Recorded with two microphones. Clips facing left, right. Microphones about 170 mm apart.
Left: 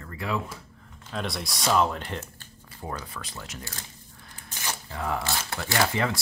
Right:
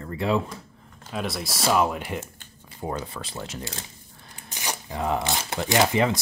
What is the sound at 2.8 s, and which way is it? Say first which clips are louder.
Speech: right 5 dB; 25° right (ahead or behind).